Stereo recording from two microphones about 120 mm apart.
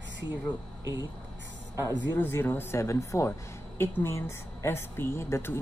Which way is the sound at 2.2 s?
20° left (ahead or behind).